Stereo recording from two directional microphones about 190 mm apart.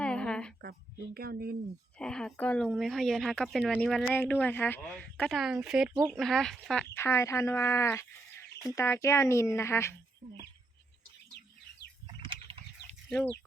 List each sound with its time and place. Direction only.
0.0 s a sound: 5° left (ahead or behind)
0.6 s speech: 55° right (ahead or behind)
2.0 s a woman's voice: 5° left (ahead or behind)
12.2 s livestock: 30° right (ahead or behind)